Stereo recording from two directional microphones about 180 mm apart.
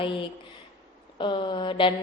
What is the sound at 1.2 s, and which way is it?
Speech, 25° left (ahead or behind).